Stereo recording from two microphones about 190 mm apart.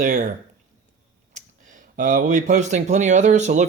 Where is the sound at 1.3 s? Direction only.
40° right (ahead or behind).